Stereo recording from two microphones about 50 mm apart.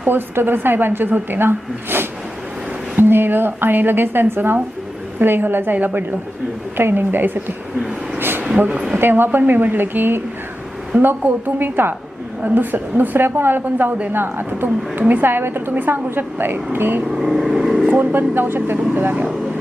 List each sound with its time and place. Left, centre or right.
0.0 s a woman's voice: right
7.8 s speech: centre
9.0 s a woman's voice: right
11.2 s a woman's voice: right
15.7 s a woman's voice: right
17.2 s speech: centre
17.4 s vehicle: centre
18.0 s a woman's voice: right
19.1 s speech: right